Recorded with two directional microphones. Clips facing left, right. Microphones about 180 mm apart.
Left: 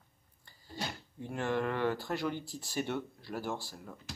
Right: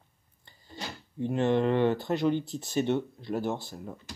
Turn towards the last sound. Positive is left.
turn(degrees=-20)  # may be behind; listen again after turning